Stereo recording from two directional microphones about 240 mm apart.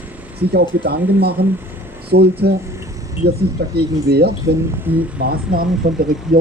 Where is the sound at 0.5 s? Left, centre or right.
Right.